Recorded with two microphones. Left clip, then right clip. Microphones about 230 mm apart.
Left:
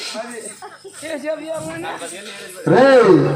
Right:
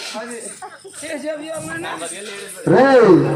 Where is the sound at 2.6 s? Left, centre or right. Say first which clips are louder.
Even; left.